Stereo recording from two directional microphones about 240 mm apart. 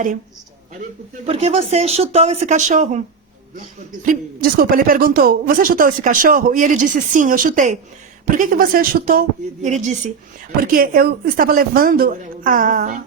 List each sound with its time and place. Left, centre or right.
1.2 s speech: right
4.0 s speech: right